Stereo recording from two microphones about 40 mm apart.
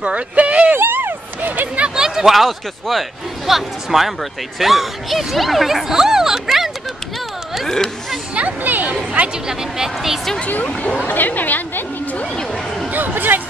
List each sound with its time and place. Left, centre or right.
0.0 s speech: right
0.7 s a sound: right
2.0 s speech: centre
7.6 s speech: centre
8.4 s speech: right
9.5 s speech: centre
11.1 s speech: left
12.9 s a sound: right